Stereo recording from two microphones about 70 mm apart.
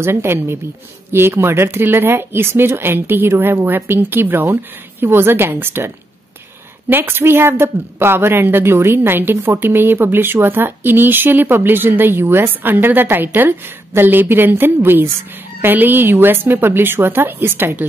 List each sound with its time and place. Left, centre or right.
0.0 s speech: right
6.9 s speech: right